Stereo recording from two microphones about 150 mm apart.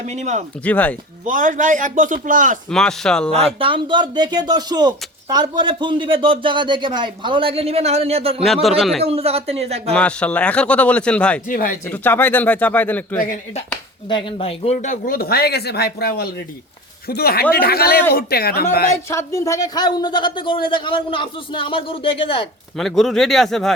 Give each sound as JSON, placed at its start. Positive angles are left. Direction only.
{"t": 0.0, "sound": "speech", "side_deg": -50}
{"t": 0.6, "sound": "a man's voice", "side_deg": 10}
{"t": 1.2, "sound": "a man's voice", "side_deg": -60}
{"t": 2.6, "sound": "speech", "side_deg": 5}
{"t": 3.6, "sound": "speech", "side_deg": -35}
{"t": 9.9, "sound": "a man's voice", "side_deg": 5}
{"t": 11.4, "sound": "speech", "side_deg": 65}
{"t": 11.9, "sound": "a man's voice", "side_deg": 15}
{"t": 14.1, "sound": "speech", "side_deg": 35}
{"t": 19.1, "sound": "a man's voice", "side_deg": 20}
{"t": 22.8, "sound": "speech", "side_deg": 0}